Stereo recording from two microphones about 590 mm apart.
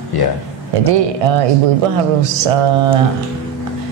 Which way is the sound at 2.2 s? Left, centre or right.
Right.